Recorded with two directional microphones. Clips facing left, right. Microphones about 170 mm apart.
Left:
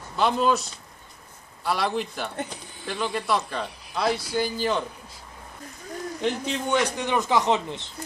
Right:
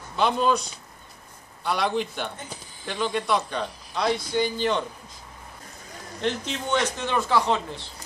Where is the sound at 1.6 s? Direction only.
Centre (ahead or behind).